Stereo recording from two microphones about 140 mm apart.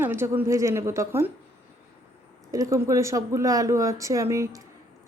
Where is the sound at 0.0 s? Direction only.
15° right (ahead or behind).